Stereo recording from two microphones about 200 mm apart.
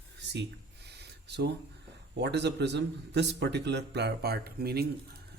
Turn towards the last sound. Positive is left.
turn(degrees=-50)  # may be behind; listen again after turning